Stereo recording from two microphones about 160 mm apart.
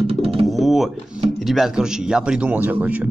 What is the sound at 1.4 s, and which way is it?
Speech, centre (ahead or behind).